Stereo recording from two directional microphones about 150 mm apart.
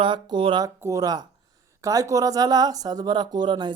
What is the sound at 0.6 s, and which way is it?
Speech, 20° right (ahead or behind).